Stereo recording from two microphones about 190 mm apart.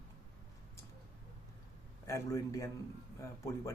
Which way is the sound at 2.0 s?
15° left (ahead or behind).